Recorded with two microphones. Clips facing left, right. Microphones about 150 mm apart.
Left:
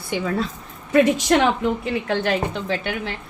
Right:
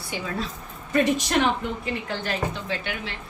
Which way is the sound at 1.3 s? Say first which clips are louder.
Left 5 dB; 65° left (ahead or behind).